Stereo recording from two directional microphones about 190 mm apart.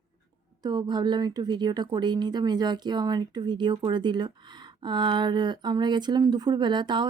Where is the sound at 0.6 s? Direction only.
20° right (ahead or behind).